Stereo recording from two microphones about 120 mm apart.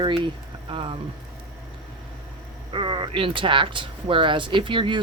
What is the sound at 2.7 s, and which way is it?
Speech, 45° right (ahead or behind).